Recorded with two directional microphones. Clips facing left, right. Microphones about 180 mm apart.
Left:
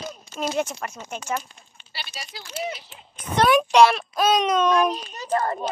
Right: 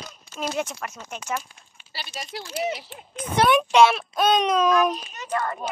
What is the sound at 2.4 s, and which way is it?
Speech, 30° right (ahead or behind).